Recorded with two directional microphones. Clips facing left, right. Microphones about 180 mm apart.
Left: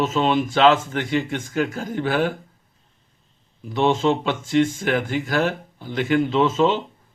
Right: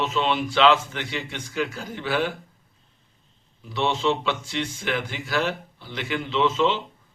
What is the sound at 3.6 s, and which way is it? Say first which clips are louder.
Speech: left 5 dB; 50° left (ahead or behind).